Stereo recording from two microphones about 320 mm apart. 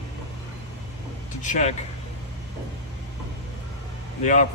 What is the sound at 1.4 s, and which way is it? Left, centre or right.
Speech, left.